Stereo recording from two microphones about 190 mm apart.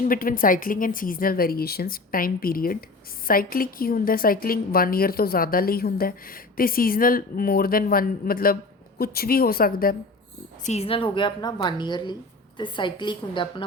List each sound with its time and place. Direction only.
0.0 s a woman's voice: 45° left (ahead or behind)
10.6 s a woman's voice: 35° left (ahead or behind)